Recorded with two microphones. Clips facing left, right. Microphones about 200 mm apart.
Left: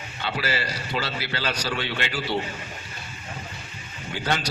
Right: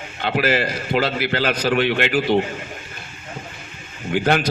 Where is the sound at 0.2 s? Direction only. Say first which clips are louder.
Right 9 dB; 55° right (ahead or behind).